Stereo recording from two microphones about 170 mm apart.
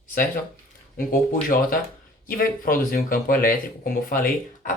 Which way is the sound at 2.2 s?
55° left (ahead or behind).